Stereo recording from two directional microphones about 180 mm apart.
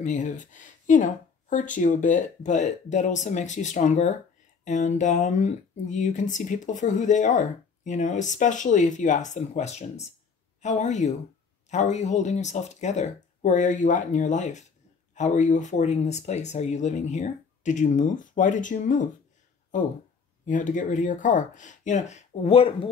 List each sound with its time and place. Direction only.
0.0 s speech: 45° left (ahead or behind)